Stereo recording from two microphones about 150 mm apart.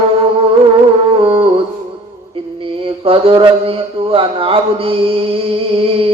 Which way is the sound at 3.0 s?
35° right (ahead or behind).